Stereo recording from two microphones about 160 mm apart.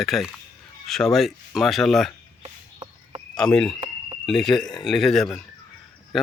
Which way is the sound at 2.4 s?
30° right (ahead or behind).